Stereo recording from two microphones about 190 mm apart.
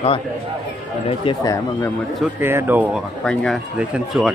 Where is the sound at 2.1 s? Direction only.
10° right (ahead or behind).